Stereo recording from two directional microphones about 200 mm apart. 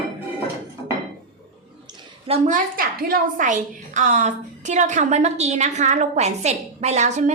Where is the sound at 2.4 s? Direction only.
45° right (ahead or behind).